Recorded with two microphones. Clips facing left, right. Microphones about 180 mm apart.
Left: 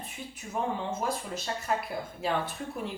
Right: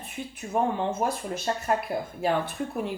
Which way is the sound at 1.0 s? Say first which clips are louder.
Right 4 dB; 55° right (ahead or behind).